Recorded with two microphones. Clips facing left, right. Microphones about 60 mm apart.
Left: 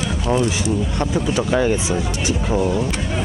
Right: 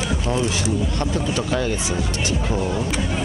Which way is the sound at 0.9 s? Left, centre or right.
Centre.